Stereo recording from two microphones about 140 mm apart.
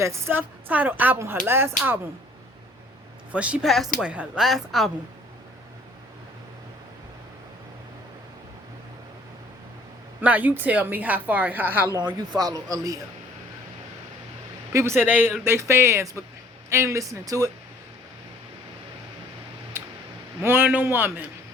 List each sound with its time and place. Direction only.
0.0 s a woman's voice: 20° right (ahead or behind)
3.3 s a woman's voice: 10° right (ahead or behind)
10.2 s a woman's voice: 10° right (ahead or behind)
11.9 s speech: 30° right (ahead or behind)
14.7 s a woman's voice: 20° right (ahead or behind)
19.8 s a sound: 20° right (ahead or behind)
20.4 s a woman's voice: 15° right (ahead or behind)